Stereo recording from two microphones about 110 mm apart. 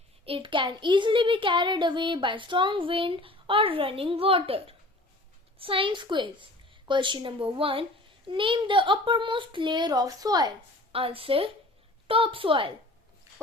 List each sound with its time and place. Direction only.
0.3 s a child's voice: 50° right (ahead or behind); by 10.5 s 35° right (ahead or behind)
10.9 s a child's voice: 55° right (ahead or behind)